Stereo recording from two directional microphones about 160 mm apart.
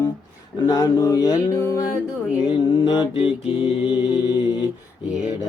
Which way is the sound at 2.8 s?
30° left (ahead or behind).